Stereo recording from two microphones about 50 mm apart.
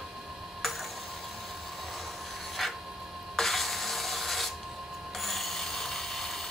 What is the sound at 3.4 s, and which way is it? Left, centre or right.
Rub, centre.